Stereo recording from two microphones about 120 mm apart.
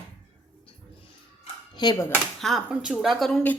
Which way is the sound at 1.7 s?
35° left (ahead or behind).